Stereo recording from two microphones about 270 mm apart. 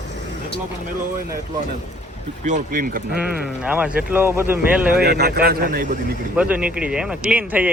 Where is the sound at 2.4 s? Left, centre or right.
Right.